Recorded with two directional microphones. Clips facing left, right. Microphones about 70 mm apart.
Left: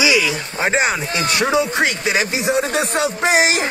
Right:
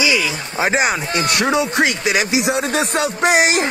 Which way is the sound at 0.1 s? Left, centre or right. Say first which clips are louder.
Left 2 dB; centre.